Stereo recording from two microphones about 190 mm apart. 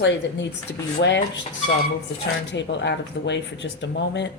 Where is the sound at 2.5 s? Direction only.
70° left (ahead or behind).